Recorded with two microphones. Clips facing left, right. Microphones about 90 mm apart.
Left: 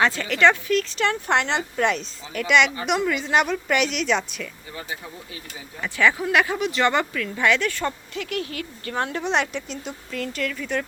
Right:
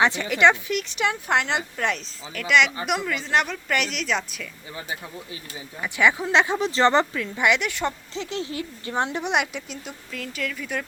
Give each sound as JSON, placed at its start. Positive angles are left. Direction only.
{"t": 0.0, "sound": "speech", "side_deg": -20}
{"t": 5.8, "sound": "speech", "side_deg": -15}
{"t": 7.0, "sound": "a woman's voice", "side_deg": -20}